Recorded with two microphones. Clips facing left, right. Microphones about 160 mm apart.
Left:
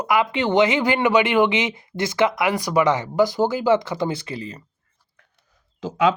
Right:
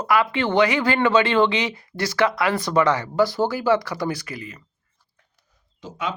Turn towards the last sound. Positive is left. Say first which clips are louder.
# left 10 dB
turn(degrees=90)